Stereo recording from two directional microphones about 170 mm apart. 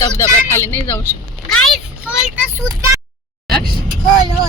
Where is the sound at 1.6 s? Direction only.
Centre (ahead or behind).